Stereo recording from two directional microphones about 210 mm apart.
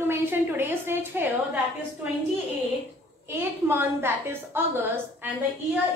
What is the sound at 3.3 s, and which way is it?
A woman's voice, 10° right (ahead or behind).